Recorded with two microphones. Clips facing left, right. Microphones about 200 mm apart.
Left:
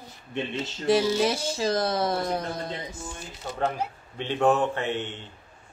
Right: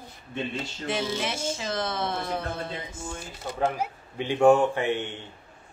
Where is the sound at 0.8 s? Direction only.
35° left (ahead or behind).